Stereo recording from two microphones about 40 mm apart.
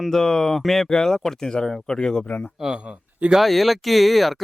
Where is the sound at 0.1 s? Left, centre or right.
Centre.